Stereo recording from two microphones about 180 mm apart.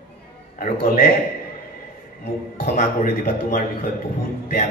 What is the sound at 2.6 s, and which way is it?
A woman's voice, 50° left (ahead or behind).